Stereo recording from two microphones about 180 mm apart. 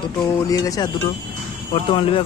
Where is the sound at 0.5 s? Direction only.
20° left (ahead or behind).